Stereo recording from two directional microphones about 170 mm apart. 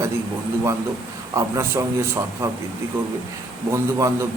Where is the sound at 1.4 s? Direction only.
15° right (ahead or behind).